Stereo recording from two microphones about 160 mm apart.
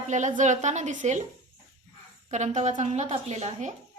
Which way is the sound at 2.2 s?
50° right (ahead or behind).